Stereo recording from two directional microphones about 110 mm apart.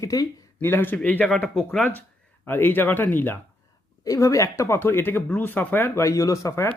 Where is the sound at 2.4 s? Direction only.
20° left (ahead or behind).